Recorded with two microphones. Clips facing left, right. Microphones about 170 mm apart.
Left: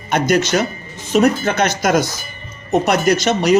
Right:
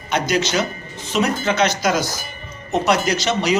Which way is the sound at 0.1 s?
50° left (ahead or behind).